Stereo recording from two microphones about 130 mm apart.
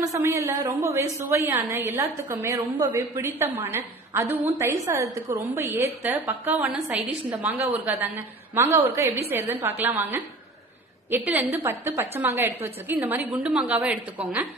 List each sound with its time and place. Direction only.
0.2 s a woman's voice: 20° right (ahead or behind)